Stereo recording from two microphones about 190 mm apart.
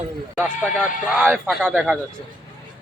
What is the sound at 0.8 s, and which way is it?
A man's voice, 10° right (ahead or behind).